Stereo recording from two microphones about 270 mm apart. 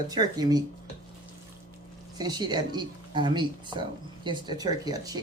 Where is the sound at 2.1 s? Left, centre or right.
Centre.